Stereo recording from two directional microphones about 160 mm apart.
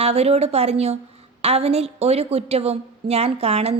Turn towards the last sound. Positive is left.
turn(degrees=-40)  # may be behind; listen again after turning